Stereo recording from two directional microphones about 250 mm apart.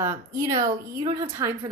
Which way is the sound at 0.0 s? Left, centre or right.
Centre.